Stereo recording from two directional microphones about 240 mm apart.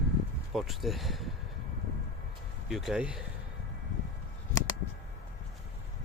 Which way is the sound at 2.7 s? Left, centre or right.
Centre.